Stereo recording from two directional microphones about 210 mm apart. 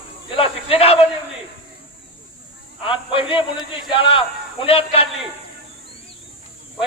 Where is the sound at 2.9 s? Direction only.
25° left (ahead or behind).